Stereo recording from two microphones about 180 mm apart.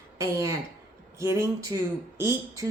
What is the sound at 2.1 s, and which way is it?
Speech, 15° right (ahead or behind).